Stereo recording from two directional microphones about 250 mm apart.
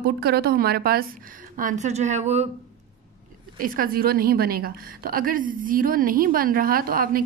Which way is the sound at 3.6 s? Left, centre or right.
Right.